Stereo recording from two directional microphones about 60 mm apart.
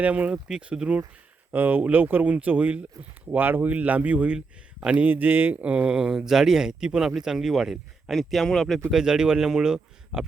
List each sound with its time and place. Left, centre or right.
0.0 s speech: right
0.4 s speech: centre
1.5 s speech: right
4.4 s speech: centre
4.9 s speech: right; by 8.8 s centre
8.9 s speech: centre